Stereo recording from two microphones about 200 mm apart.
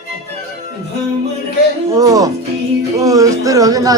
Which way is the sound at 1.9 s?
15° right (ahead or behind).